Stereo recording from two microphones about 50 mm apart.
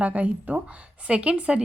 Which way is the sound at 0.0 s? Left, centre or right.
Right.